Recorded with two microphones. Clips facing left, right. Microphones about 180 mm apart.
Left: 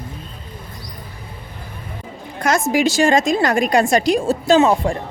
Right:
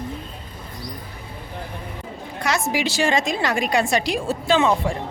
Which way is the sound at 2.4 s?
45° left (ahead or behind).